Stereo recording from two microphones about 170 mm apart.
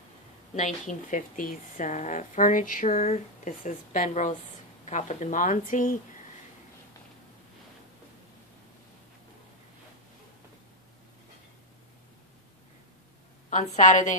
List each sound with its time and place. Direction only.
0.6 s speech: 45° left (ahead or behind)
13.5 s speech: 45° left (ahead or behind)